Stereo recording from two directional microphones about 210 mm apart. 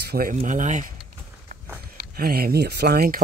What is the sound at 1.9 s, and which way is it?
Speech, 45° right (ahead or behind).